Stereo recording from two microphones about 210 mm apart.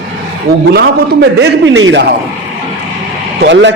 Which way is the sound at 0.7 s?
50° right (ahead or behind).